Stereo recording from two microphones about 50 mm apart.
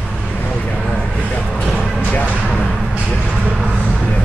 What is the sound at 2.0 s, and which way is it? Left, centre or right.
Music, left.